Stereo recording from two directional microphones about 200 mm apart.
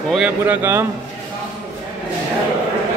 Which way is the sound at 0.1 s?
5° right (ahead or behind).